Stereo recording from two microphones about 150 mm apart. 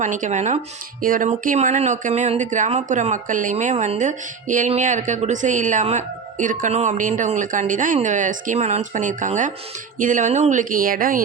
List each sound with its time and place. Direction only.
0.0 s speech: 55° right (ahead or behind)
1.0 s speech: 65° right (ahead or behind)